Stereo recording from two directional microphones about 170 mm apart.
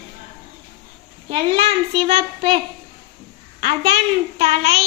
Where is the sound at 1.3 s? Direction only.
35° right (ahead or behind).